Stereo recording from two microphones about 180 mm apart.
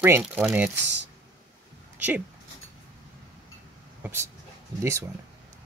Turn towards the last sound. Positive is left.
turn(degrees=-15)  # may be behind; listen again after turning